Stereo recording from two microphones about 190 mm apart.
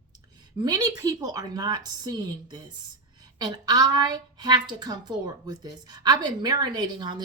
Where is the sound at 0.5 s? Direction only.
20° right (ahead or behind).